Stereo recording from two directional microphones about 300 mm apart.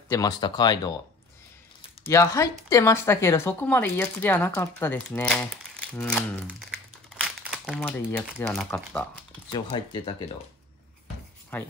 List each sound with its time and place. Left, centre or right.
0.1 s speech: centre
7.2 s crumpling: centre
8.4 s speech: centre
9.5 s speech: centre
11.5 s speech: centre